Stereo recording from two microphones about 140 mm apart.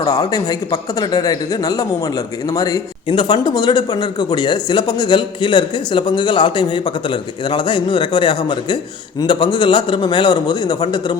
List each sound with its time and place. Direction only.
0.0 s speech: 30° left (ahead or behind)
3.1 s speech: 35° left (ahead or behind)